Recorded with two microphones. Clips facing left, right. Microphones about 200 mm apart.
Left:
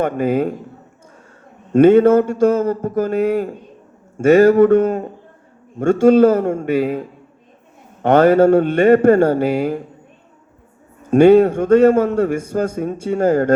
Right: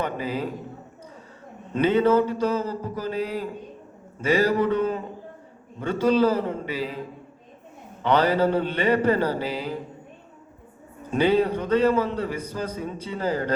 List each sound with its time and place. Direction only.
0.0 s a man's voice: 50° left (ahead or behind)
1.7 s a man's voice: 50° left (ahead or behind)
8.0 s a man's voice: 50° left (ahead or behind)
11.1 s a man's voice: 50° left (ahead or behind)